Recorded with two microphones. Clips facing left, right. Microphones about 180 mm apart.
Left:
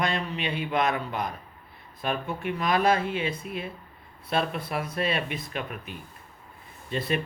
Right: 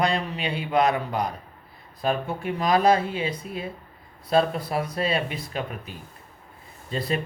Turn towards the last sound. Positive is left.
turn(degrees=-30)  # may be behind; listen again after turning